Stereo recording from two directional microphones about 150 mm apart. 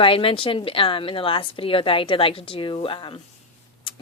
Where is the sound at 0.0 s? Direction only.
35° left (ahead or behind).